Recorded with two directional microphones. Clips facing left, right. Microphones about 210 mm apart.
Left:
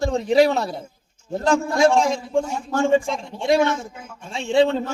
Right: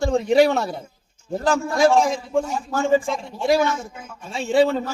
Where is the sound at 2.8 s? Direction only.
30° left (ahead or behind).